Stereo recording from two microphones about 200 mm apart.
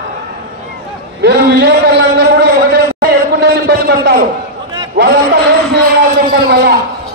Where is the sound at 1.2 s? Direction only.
55° right (ahead or behind).